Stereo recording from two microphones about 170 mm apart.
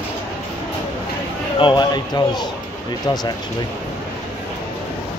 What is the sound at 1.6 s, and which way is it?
Speech, 25° left (ahead or behind).